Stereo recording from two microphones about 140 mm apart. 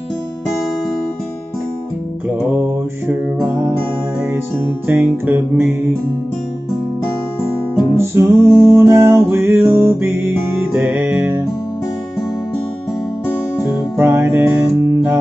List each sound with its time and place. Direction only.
4.8 s music: 15° right (ahead or behind)
8.0 s music: 20° right (ahead or behind)
13.9 s music: 15° right (ahead or behind)